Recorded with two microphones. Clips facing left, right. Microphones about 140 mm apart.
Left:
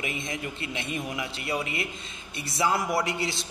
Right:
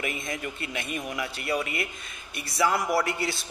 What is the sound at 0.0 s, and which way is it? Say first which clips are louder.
A man's voice: right 1 dB; 20° left (ahead or behind).